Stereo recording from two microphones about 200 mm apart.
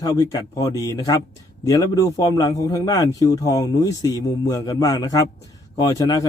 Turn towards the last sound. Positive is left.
turn(degrees=20)  # may be behind; listen again after turning